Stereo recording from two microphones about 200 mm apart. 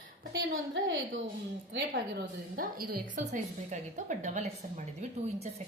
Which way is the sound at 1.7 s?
55° right (ahead or behind).